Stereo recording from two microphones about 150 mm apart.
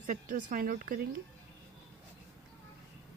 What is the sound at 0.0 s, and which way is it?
Speech, 60° right (ahead or behind).